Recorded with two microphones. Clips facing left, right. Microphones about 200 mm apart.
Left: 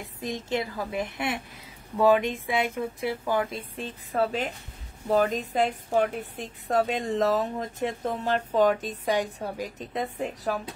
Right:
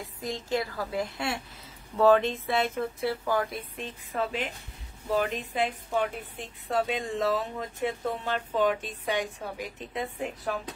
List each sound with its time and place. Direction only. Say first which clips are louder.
0.0 s a woman's voice: left 2 dB; 20° left (ahead or behind)
3.7 s a woman's voice: left 7 dB; 40° left (ahead or behind)